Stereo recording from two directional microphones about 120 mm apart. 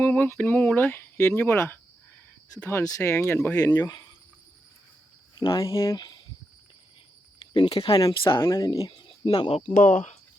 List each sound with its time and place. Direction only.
0.0 s speech: 15° left (ahead or behind)
5.4 s speech: 30° left (ahead or behind)
7.9 s speech: 35° left (ahead or behind)
8.4 s speech: 30° left (ahead or behind)
8.9 s speech: 45° left (ahead or behind)
9.6 s speech: 60° left (ahead or behind); by 10.2 s 85° left